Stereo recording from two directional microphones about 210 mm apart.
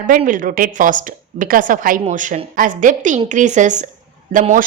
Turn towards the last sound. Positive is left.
turn(degrees=-40)  # may be behind; listen again after turning